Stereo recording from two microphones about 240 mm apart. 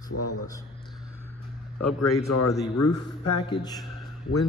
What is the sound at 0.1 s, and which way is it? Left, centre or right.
Speech, left.